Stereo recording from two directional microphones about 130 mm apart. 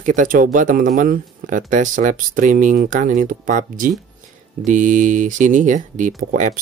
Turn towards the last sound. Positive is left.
turn(degrees=-90)